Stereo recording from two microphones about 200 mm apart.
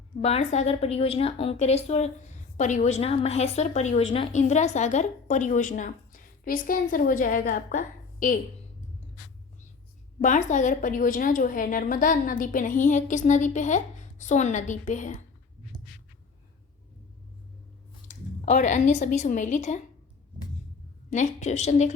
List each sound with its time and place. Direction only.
0.2 s a woman's voice: 30° left (ahead or behind)
10.2 s a woman's voice: 40° left (ahead or behind)
18.1 s speech: 35° left (ahead or behind)
21.1 s a woman's voice: 35° left (ahead or behind)